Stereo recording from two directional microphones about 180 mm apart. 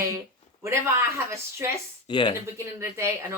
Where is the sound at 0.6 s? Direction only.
15° right (ahead or behind).